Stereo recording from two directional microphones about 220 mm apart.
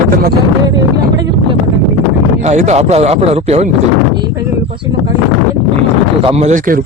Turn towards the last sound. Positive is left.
turn(degrees=-35)  # may be behind; listen again after turning